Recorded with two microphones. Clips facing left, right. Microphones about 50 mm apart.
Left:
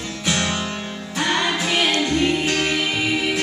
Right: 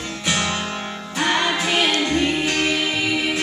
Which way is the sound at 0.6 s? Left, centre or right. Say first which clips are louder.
Right 1 dB; centre.